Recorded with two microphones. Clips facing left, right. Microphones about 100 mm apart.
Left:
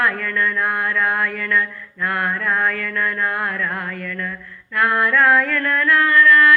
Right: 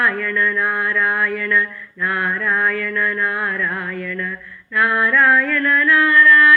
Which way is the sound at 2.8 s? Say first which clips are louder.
Right 2 dB; 10° right (ahead or behind).